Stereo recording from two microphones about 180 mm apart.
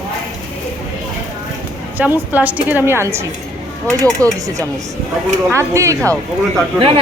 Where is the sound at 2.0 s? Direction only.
10° right (ahead or behind).